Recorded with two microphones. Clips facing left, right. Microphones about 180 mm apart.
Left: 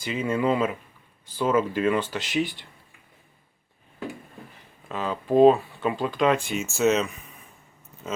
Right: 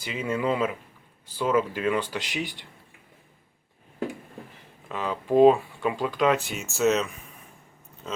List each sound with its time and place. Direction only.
0.0 s speech: 10° right (ahead or behind)
4.9 s speech: 15° right (ahead or behind); by 8.2 s 5° left (ahead or behind)